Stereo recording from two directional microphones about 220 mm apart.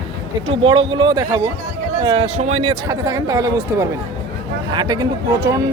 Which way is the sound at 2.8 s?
15° right (ahead or behind).